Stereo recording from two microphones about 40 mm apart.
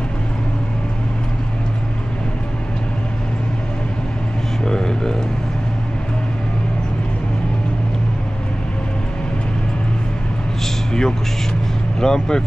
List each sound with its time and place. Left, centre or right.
4.6 s a sound: centre
10.9 s music: centre
12.0 s speech: centre